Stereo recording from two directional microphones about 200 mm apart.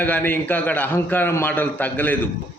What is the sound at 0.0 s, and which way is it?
A man's voice, 10° left (ahead or behind).